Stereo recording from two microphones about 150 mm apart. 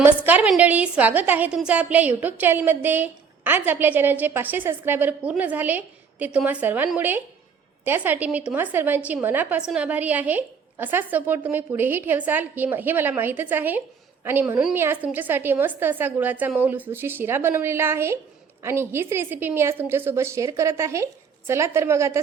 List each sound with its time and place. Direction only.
0.0 s a woman's voice: 10° right (ahead or behind)